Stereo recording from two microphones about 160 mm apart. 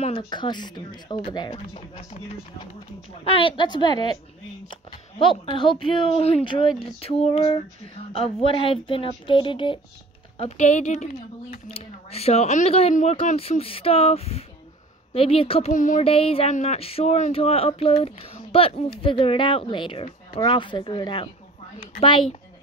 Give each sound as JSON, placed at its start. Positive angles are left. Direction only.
{"t": 0.0, "sound": "speech", "side_deg": 30}
{"t": 5.2, "sound": "speech", "side_deg": 35}
{"t": 10.3, "sound": "speech", "side_deg": 40}
{"t": 15.7, "sound": "speech", "side_deg": 55}
{"t": 16.0, "sound": "speech", "side_deg": 35}